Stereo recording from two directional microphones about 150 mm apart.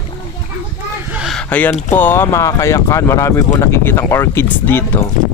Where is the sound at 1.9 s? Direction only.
15° left (ahead or behind).